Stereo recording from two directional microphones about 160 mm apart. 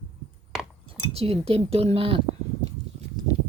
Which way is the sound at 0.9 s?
40° right (ahead or behind).